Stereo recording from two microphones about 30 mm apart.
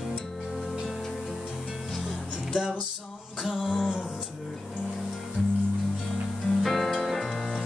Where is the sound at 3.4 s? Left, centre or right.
Centre.